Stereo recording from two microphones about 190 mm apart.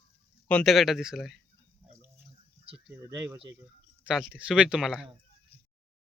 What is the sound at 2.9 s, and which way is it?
A man's voice, 10° right (ahead or behind).